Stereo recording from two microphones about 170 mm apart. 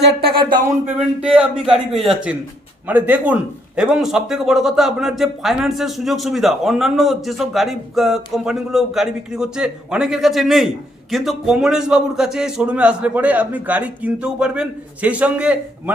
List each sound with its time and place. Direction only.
0.0 s speech: 70° right (ahead or behind)
0.9 s a man's voice: 5° right (ahead or behind)